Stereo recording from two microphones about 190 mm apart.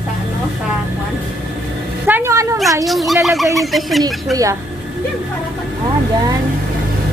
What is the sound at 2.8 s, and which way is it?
Speech, centre (ahead or behind).